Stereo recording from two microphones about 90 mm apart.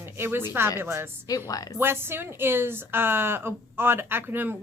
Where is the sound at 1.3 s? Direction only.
45° left (ahead or behind).